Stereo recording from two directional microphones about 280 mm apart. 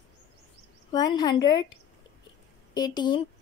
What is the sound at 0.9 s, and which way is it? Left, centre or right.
Speech, centre.